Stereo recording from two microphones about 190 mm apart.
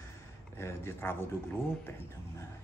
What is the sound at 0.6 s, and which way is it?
Speech, 15° left (ahead or behind).